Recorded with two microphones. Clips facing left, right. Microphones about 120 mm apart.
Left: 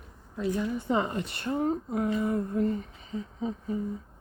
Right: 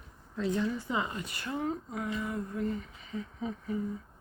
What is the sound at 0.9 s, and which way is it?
Speech, 40° left (ahead or behind).